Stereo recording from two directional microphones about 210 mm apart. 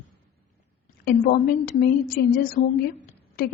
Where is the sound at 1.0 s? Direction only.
45° left (ahead or behind).